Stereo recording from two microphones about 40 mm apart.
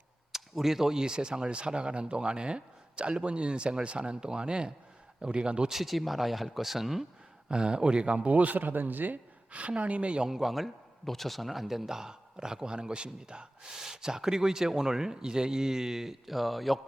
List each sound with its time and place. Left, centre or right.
0.3 s speech: centre
5.6 s speech: centre
7.4 s speech: right
9.5 s speech: right
10.2 s a man's voice: centre